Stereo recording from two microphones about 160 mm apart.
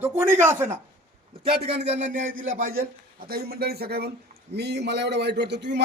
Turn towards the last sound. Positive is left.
turn(degrees=-90)